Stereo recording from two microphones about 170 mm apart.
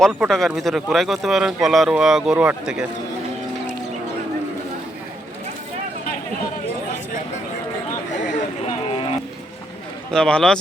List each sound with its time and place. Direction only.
0.0 s speech: centre (ahead or behind)
8.3 s a sound: 35° left (ahead or behind)
10.1 s speech: 5° left (ahead or behind)